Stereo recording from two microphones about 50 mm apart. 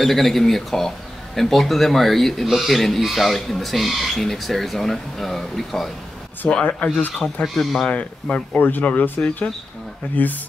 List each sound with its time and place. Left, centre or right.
0.0 s speech: centre
6.6 s speech: left
7.4 s speech: centre
7.8 s speech: left
8.5 s speech: left
10.2 s speech: left